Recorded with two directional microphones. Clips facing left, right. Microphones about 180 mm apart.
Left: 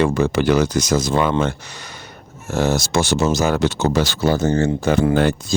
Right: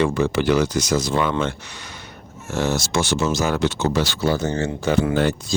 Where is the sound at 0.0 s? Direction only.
45° left (ahead or behind).